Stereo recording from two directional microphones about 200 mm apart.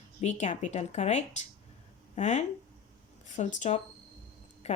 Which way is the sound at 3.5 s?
35° left (ahead or behind).